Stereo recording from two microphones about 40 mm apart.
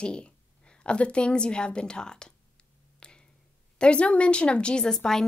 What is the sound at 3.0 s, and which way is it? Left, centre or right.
Finger snapping, left.